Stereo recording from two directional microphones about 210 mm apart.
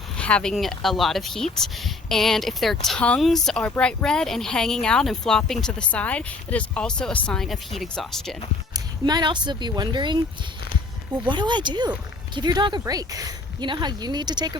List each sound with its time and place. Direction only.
0.2 s speech: 5° left (ahead or behind)
8.7 s speech: 20° right (ahead or behind)
11.3 s speech: 20° right (ahead or behind)